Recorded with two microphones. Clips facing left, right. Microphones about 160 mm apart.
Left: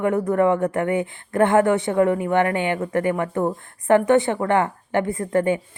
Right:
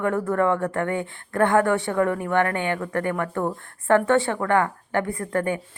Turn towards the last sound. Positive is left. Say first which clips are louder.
# left 4 dB
turn(degrees=20)  # may be behind; listen again after turning